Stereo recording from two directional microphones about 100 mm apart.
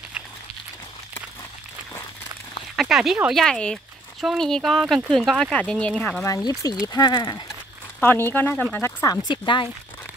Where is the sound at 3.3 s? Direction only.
5° left (ahead or behind).